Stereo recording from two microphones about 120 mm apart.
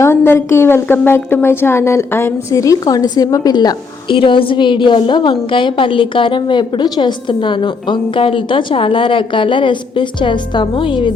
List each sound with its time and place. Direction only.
0.0 s a woman's voice: 25° left (ahead or behind); by 11.1 s 45° left (ahead or behind)